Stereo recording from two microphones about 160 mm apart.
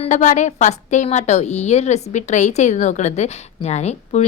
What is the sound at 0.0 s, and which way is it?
A woman's voice, 50° left (ahead or behind).